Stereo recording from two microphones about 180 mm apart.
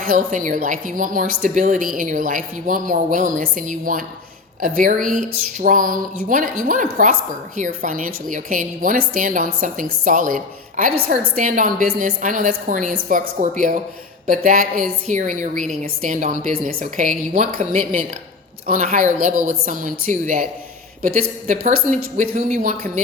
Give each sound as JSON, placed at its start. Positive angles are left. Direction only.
{"t": 0.0, "sound": "a woman's voice", "side_deg": -50}